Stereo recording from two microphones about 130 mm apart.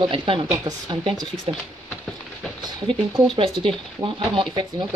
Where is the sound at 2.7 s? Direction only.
40° right (ahead or behind).